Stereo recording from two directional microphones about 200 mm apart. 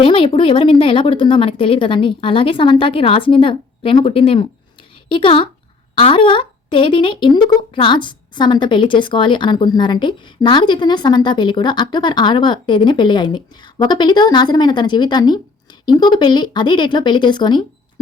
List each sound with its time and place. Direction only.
0.0 s speech: 25° left (ahead or behind)